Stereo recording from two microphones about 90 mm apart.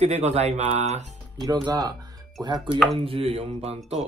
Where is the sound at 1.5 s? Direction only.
50° right (ahead or behind).